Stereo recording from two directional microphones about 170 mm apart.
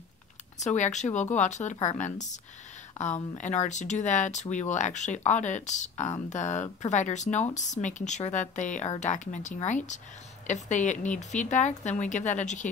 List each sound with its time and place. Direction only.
0.6 s speech: 45° left (ahead or behind)